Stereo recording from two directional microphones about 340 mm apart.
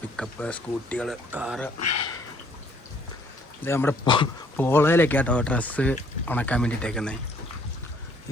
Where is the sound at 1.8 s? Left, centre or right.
Left.